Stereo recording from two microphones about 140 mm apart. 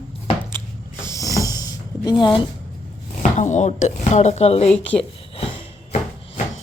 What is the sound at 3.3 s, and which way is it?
Speech, 60° left (ahead or behind).